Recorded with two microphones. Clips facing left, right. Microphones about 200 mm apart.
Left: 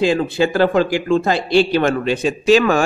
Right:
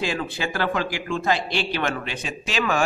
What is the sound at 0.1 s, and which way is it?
A man's voice, 30° left (ahead or behind).